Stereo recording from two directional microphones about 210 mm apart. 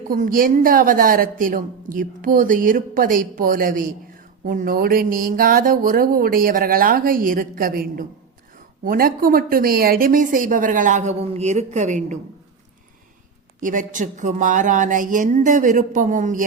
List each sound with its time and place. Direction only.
0.1 s a woman's voice: 40° right (ahead or behind)
13.6 s a woman's voice: 40° right (ahead or behind)